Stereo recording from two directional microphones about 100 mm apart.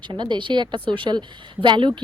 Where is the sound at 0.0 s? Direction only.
50° right (ahead or behind).